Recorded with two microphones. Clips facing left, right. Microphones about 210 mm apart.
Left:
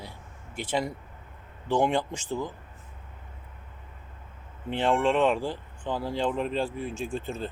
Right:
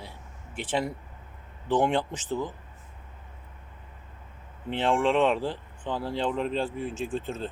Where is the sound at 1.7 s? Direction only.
5° right (ahead or behind).